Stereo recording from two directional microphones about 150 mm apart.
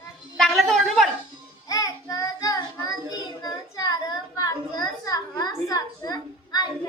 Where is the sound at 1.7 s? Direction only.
25° left (ahead or behind).